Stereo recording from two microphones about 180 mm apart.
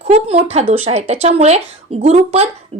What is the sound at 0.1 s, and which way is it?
Speech, 35° right (ahead or behind).